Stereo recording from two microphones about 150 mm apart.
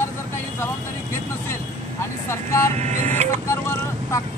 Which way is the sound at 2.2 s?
20° left (ahead or behind).